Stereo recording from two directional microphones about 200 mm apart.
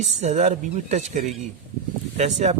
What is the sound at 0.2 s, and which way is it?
A man's voice, 35° right (ahead or behind).